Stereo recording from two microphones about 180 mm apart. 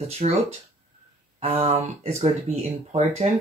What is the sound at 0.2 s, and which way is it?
Speech, 35° right (ahead or behind).